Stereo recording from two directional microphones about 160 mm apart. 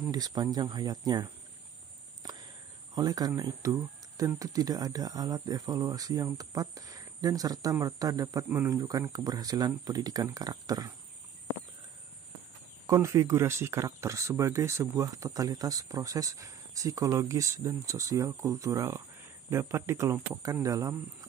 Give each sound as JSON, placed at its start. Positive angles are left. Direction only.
{"t": 0.1, "sound": "speech", "side_deg": -25}
{"t": 2.2, "sound": "a sound", "side_deg": -25}
{"t": 4.4, "sound": "speech", "side_deg": -20}
{"t": 12.8, "sound": "speech", "side_deg": -20}